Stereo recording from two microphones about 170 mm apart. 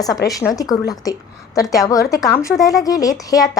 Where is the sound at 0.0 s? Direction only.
20° left (ahead or behind).